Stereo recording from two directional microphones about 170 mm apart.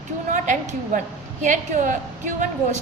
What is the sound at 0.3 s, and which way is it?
A woman's voice, 45° right (ahead or behind).